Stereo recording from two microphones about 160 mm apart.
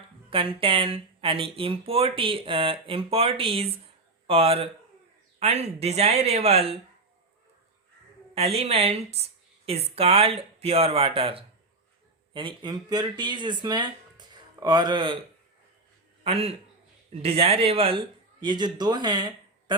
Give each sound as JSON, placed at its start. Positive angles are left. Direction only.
{"t": 0.3, "sound": "speech", "side_deg": -35}
{"t": 8.4, "sound": "speech", "side_deg": -40}
{"t": 16.2, "sound": "speech", "side_deg": -40}